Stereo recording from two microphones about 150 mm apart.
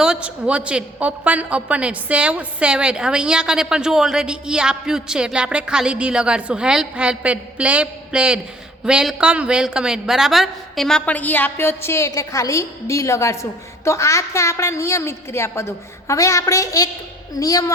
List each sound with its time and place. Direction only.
0.0 s a woman's voice: 5° right (ahead or behind); by 17.7 s 25° left (ahead or behind)